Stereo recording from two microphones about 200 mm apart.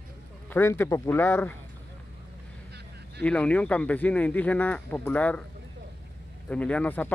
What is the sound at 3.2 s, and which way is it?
Speech, 5° left (ahead or behind).